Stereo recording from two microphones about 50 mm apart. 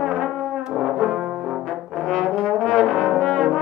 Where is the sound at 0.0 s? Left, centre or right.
Centre.